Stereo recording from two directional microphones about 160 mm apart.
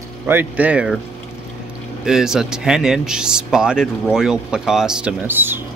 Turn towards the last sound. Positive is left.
turn(degrees=-15)  # may be behind; listen again after turning